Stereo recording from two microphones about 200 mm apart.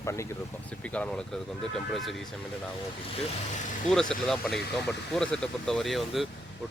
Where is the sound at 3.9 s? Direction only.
Centre (ahead or behind).